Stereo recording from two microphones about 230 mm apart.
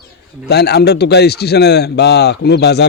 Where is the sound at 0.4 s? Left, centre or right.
Left.